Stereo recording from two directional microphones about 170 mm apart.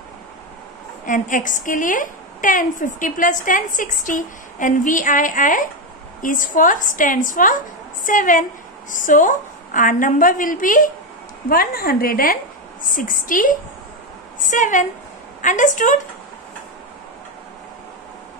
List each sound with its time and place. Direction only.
1.0 s a woman's voice: 50° left (ahead or behind)